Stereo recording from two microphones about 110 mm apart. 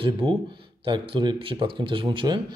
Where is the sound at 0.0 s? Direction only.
50° right (ahead or behind).